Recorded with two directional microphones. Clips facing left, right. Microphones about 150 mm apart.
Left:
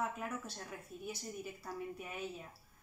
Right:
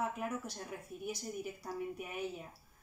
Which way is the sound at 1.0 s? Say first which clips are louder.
Right 4 dB; 15° right (ahead or behind).